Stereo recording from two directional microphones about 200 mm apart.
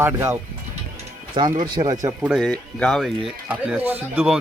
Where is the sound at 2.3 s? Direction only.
5° left (ahead or behind).